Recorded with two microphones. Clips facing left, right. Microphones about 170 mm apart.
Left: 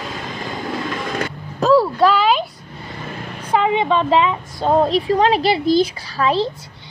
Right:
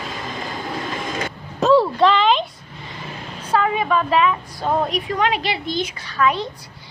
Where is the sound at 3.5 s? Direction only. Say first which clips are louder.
Left 2 dB; 20° left (ahead or behind).